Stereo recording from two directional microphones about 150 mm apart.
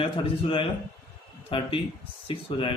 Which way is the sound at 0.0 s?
35° left (ahead or behind).